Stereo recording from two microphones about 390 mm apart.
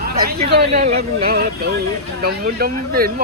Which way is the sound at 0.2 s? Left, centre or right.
Right.